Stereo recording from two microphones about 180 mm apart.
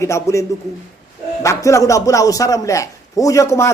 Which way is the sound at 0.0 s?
15° left (ahead or behind).